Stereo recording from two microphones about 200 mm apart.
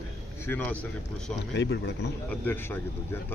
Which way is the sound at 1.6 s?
55° left (ahead or behind).